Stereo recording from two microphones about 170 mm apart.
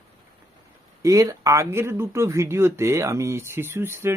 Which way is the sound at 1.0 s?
20° right (ahead or behind).